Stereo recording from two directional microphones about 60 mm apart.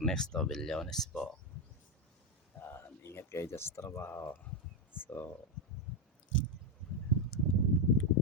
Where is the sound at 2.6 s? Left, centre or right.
Left.